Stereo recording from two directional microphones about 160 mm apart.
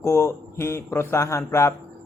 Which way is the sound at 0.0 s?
15° left (ahead or behind).